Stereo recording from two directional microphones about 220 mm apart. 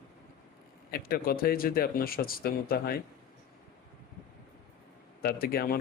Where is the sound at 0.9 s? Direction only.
45° left (ahead or behind).